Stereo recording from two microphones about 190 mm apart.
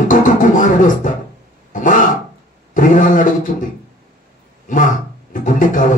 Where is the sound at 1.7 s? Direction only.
45° left (ahead or behind).